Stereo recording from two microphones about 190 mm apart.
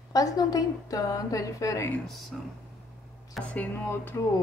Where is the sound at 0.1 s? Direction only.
20° left (ahead or behind).